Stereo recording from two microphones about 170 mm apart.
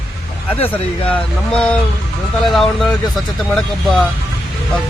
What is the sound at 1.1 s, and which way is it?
Speech, 5° left (ahead or behind).